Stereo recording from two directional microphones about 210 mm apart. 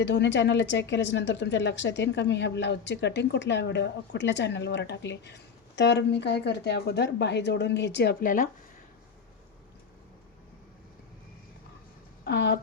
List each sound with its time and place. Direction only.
0.0 s a woman's voice: 55° left (ahead or behind)
8.2 s speech: 40° left (ahead or behind)
12.2 s speech: 55° left (ahead or behind)